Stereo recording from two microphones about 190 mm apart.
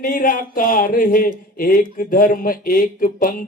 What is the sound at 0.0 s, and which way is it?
Speech, 45° left (ahead or behind).